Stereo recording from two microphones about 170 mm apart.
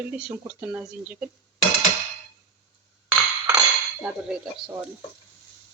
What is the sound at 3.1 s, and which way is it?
Music, 5° right (ahead or behind).